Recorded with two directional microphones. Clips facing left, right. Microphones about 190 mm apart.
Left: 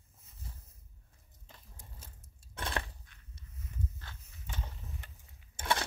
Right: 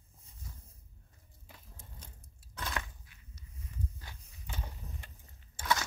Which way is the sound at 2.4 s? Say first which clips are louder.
Left 2 dB; 30° left (ahead or behind).